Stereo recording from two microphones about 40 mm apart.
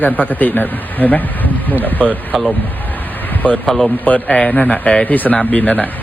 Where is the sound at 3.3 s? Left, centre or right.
Left.